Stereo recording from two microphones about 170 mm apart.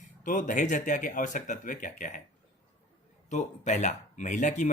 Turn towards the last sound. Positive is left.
turn(degrees=45)  # may be behind; listen again after turning